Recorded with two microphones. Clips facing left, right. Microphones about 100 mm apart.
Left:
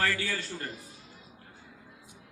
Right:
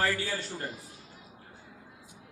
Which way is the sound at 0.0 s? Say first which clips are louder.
Right 1 dB; 15° right (ahead or behind).